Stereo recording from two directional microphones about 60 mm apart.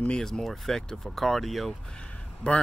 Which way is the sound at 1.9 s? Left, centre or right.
Centre.